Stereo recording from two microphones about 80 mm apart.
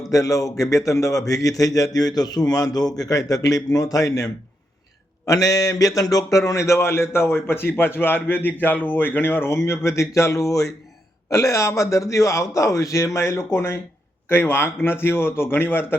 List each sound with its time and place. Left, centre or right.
0.1 s a man's voice: left